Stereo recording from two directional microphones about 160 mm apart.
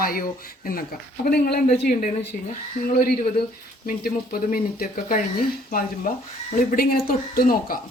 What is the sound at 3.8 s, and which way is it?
Speech, 65° left (ahead or behind).